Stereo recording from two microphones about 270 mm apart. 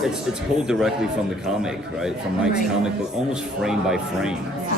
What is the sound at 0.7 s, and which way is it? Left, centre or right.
Speech, centre.